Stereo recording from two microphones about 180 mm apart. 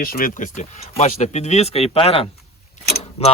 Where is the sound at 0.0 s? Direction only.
50° left (ahead or behind).